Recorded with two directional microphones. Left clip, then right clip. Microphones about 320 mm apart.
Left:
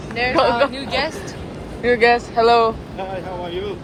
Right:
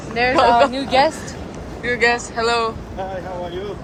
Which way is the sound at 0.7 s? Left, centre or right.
Right.